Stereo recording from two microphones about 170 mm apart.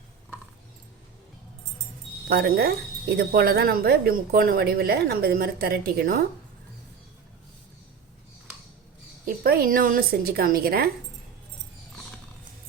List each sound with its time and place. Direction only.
2.3 s a woman's voice: 70° right (ahead or behind)
9.2 s a woman's voice: 60° right (ahead or behind)